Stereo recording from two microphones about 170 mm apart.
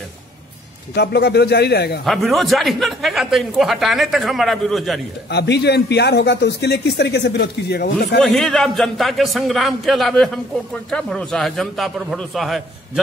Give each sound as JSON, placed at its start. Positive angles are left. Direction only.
{"t": 0.9, "sound": "speech", "side_deg": 75}
{"t": 2.0, "sound": "a man's voice", "side_deg": 0}
{"t": 5.3, "sound": "speech", "side_deg": 80}
{"t": 8.2, "sound": "a man's voice", "side_deg": 5}